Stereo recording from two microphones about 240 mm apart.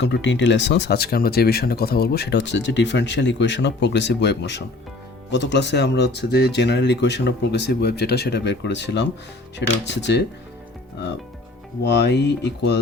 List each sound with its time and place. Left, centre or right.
0.0 s speech: left
11.8 s speech: left